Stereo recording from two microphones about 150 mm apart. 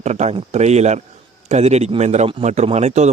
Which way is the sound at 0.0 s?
50° right (ahead or behind).